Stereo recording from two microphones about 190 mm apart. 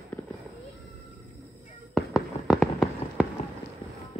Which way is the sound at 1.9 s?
Centre (ahead or behind).